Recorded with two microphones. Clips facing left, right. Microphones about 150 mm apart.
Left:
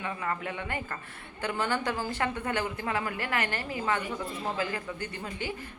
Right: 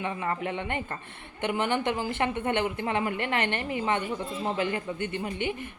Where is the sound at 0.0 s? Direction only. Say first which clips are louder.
Right 3 dB; 25° right (ahead or behind).